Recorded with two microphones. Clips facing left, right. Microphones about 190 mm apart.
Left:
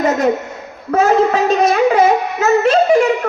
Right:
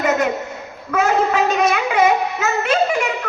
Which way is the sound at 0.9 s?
35° left (ahead or behind).